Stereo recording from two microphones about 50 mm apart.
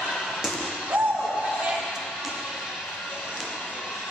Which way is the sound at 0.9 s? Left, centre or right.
Right.